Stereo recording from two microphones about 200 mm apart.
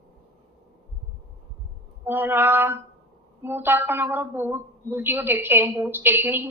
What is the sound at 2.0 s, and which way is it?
A woman's voice, 10° right (ahead or behind).